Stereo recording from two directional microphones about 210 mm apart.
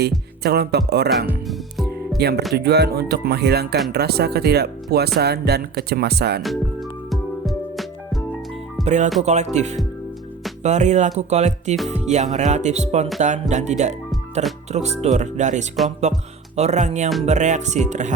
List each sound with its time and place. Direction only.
0.0 s music: 50° right (ahead or behind)
1.5 s music: centre (ahead or behind)
2.1 s speech: 50° right (ahead or behind)
6.4 s music: centre (ahead or behind)
8.8 s speech: 35° right (ahead or behind)
9.2 s music: 35° right (ahead or behind)